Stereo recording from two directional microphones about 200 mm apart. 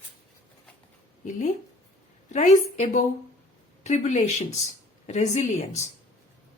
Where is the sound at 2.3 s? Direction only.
35° left (ahead or behind).